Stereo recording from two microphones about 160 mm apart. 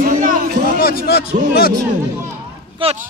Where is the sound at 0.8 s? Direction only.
70° left (ahead or behind).